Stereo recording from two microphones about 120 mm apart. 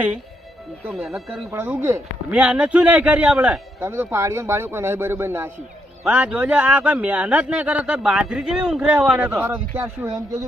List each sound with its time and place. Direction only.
1.0 s speech: 5° right (ahead or behind)
1.5 s a man's voice: 20° right (ahead or behind)